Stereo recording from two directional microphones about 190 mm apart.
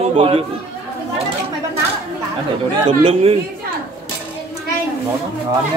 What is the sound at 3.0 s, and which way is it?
Speech, 30° right (ahead or behind).